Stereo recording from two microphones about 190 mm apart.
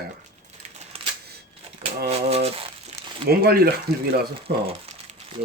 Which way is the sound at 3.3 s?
55° right (ahead or behind).